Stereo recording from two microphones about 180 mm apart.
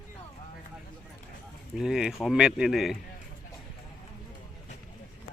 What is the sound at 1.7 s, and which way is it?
Speech, 5° right (ahead or behind).